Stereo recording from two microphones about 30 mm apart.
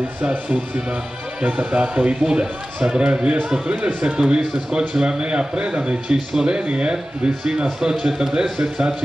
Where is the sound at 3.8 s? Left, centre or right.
Right.